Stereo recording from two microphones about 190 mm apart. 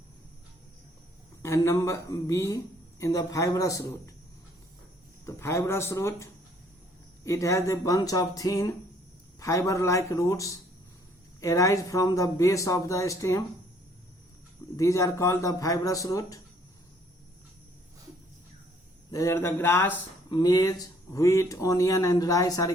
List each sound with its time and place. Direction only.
1.4 s speech: 15° left (ahead or behind)
5.2 s speech: 15° left (ahead or behind)
7.3 s speech: 15° left (ahead or behind)
14.8 s speech: 15° left (ahead or behind)
19.1 s speech: 15° left (ahead or behind)